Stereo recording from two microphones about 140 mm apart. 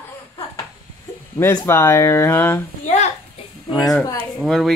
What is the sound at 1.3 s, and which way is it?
Speech, 20° left (ahead or behind).